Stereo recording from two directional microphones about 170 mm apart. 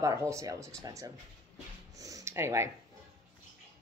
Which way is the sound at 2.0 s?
20° right (ahead or behind).